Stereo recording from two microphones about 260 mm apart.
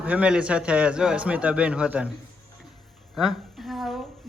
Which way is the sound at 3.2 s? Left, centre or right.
Centre.